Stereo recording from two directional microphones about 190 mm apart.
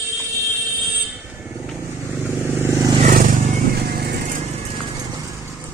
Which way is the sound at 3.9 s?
55° right (ahead or behind).